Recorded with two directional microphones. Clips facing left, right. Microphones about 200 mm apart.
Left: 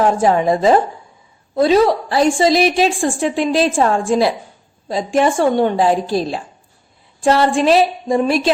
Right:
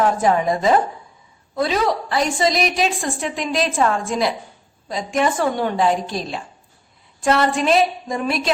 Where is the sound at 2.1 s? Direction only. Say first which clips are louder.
Left 6 dB; 30° left (ahead or behind).